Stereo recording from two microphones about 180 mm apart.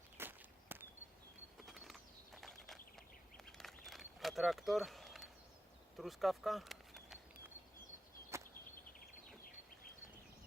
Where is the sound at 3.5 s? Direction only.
Centre (ahead or behind).